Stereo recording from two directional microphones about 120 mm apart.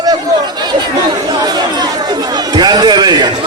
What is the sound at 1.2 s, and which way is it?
Chatter, 35° right (ahead or behind).